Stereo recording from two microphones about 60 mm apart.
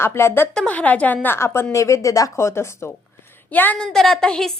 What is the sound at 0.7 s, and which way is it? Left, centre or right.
Speech, left.